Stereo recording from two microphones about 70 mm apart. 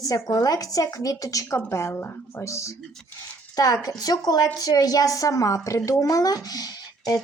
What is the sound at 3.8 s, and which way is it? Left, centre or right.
Speech, left.